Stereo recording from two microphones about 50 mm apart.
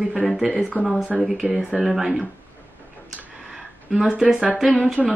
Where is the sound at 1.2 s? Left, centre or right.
Centre.